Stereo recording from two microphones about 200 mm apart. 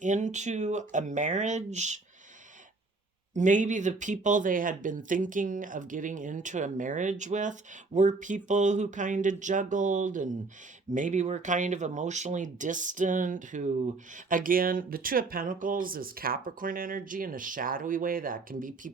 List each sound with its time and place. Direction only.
0.0 s speech: 35° right (ahead or behind)
3.3 s speech: 40° right (ahead or behind)